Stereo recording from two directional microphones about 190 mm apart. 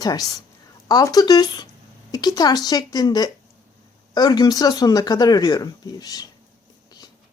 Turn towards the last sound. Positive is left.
turn(degrees=20)  # may be behind; listen again after turning